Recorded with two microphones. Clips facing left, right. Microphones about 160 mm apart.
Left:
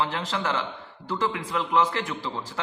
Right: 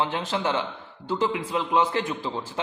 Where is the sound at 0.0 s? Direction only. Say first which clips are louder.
Right 2 dB; 20° right (ahead or behind).